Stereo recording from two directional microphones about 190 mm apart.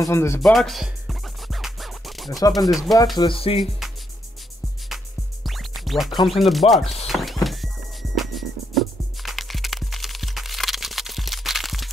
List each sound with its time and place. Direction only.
0.0 s speech: 15° left (ahead or behind)
0.4 s music: centre (ahead or behind)
2.5 s speech: centre (ahead or behind)
3.2 s speech: 30° left (ahead or behind)
4.8 s music: centre (ahead or behind)
6.2 s speech: centre (ahead or behind)
7.1 s music: centre (ahead or behind)